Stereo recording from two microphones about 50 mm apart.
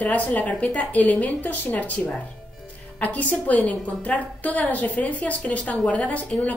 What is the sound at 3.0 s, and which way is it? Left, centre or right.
A woman's voice, left.